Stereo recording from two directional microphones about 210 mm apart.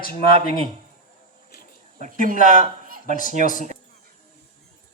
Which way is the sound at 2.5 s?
40° right (ahead or behind).